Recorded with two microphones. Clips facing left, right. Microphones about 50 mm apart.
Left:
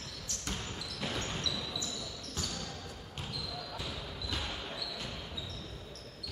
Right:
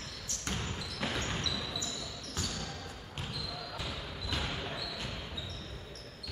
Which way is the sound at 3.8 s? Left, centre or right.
Centre.